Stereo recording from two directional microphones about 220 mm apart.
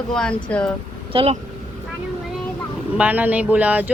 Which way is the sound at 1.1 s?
30° right (ahead or behind).